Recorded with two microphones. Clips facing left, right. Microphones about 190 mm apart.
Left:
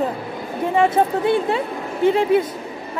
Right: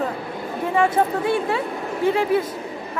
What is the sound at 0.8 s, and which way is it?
Speech, 20° left (ahead or behind).